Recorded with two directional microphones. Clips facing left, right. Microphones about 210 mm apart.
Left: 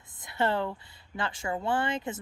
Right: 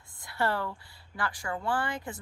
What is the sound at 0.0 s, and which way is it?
A woman's voice, 20° left (ahead or behind).